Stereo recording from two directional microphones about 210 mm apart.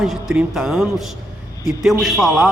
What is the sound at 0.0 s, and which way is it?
A man's voice, centre (ahead or behind).